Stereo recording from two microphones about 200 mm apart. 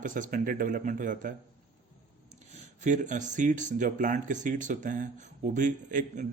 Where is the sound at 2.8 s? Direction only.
40° right (ahead or behind).